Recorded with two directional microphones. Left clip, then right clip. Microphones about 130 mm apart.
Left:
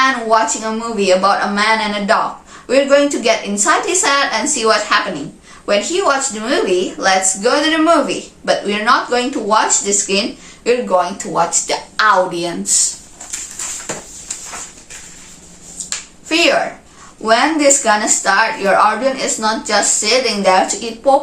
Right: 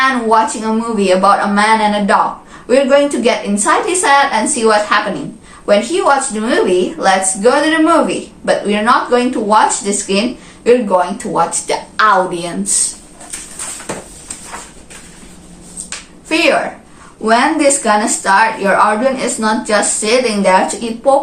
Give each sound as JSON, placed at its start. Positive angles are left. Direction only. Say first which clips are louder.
{"t": 0.0, "sound": "a woman's voice", "louder": "right 2 dB", "side_deg": 20}
{"t": 16.3, "sound": "a woman's voice", "louder": "right 1 dB", "side_deg": 15}